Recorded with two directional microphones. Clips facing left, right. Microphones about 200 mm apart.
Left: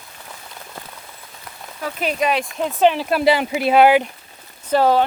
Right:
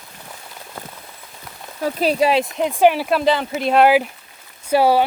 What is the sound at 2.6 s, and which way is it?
Speech, 15° right (ahead or behind).